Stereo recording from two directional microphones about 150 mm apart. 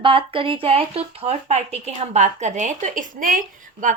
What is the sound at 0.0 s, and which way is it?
Speech, 35° right (ahead or behind).